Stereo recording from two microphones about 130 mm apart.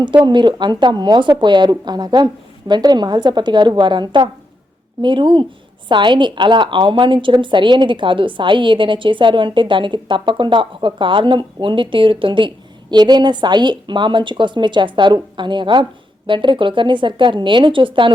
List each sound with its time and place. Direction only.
0.3 s a woman's voice: 35° right (ahead or behind)